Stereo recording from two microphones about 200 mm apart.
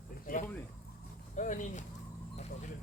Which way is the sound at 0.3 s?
45° left (ahead or behind).